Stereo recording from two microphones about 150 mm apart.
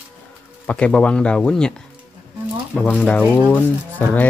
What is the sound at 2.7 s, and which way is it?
Speech, 10° left (ahead or behind).